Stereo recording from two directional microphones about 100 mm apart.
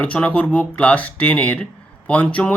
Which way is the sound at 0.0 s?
15° left (ahead or behind).